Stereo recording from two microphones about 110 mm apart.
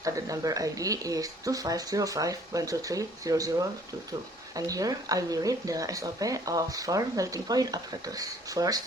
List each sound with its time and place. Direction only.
0.0 s speech: 30° right (ahead or behind)